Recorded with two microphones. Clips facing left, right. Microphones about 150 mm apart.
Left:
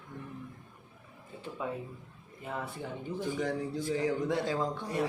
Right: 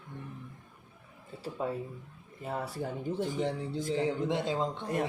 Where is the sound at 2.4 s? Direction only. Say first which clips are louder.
Right 3 dB; 35° right (ahead or behind).